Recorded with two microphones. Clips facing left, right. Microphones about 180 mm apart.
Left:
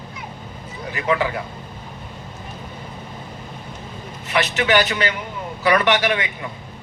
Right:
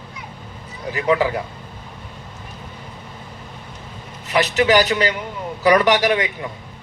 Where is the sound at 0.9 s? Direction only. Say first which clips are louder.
Right 3 dB; 35° right (ahead or behind).